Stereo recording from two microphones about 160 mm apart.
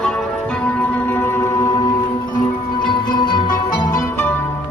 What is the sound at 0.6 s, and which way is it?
Music, 15° left (ahead or behind).